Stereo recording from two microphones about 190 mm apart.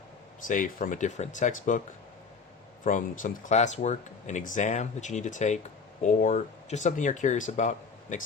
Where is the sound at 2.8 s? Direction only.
45° left (ahead or behind).